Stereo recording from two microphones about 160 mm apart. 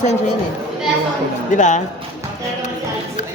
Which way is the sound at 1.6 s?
50° left (ahead or behind).